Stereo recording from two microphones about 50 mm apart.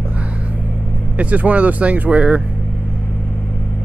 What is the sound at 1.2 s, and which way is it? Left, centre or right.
Speech, right.